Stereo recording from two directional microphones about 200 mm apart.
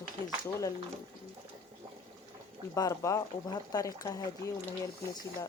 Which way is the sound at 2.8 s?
15° left (ahead or behind).